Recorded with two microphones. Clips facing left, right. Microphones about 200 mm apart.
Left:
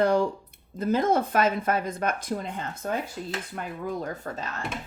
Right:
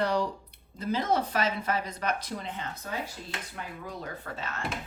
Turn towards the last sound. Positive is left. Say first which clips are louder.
# left 5 dB
turn(degrees=45)  # may be behind; listen again after turning